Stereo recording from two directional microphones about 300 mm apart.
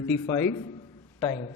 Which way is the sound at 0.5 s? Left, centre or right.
Centre.